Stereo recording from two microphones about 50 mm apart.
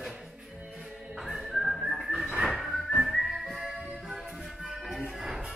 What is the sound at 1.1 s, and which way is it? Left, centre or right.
Whistling, centre.